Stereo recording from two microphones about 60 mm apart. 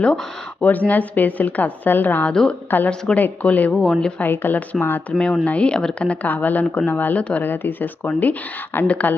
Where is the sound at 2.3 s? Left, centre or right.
Centre.